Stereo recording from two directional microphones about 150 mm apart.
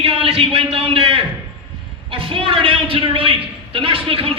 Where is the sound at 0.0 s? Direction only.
35° right (ahead or behind).